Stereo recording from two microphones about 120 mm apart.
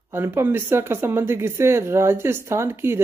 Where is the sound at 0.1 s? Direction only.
20° right (ahead or behind).